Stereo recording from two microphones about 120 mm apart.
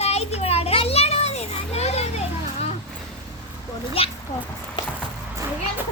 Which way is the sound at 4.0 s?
50° left (ahead or behind).